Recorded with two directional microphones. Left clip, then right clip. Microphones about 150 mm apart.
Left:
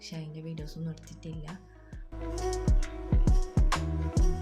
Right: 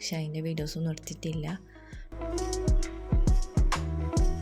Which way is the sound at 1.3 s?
Centre (ahead or behind).